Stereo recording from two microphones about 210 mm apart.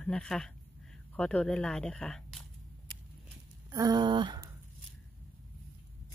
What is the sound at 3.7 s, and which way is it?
Speech, 15° right (ahead or behind).